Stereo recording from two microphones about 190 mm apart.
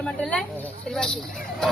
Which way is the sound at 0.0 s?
5° left (ahead or behind).